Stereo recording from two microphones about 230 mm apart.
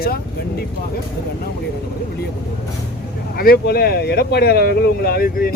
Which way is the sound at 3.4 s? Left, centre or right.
Left.